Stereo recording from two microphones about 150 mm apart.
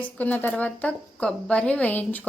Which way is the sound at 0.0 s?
10° left (ahead or behind).